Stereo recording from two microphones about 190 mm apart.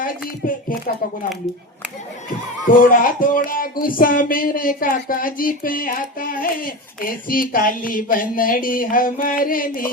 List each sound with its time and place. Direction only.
0.4 s speech: 45° left (ahead or behind)
2.6 s speech: 45° left (ahead or behind)